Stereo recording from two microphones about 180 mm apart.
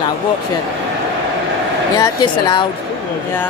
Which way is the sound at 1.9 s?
20° left (ahead or behind).